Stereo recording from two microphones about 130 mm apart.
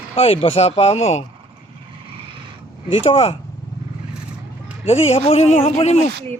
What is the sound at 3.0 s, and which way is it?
Speech, 50° left (ahead or behind).